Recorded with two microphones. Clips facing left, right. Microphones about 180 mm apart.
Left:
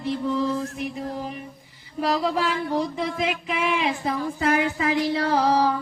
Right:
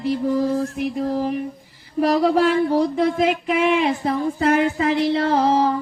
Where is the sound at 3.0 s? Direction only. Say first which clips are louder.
Right 8 dB; 55° right (ahead or behind).